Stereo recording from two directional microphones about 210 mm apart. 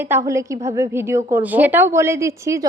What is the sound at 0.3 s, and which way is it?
A woman's voice, 15° right (ahead or behind).